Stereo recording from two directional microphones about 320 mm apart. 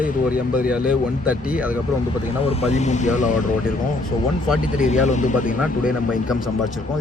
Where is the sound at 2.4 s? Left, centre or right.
Centre.